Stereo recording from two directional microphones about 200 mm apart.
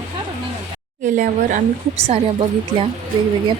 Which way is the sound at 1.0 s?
40° right (ahead or behind).